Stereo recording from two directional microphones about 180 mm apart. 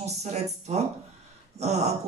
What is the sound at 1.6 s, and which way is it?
Speech, 35° right (ahead or behind).